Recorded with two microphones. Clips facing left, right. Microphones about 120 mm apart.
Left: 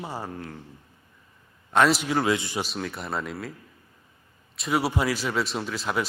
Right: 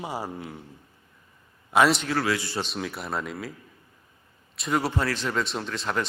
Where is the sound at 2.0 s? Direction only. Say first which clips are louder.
Left 2 dB; 20° left (ahead or behind).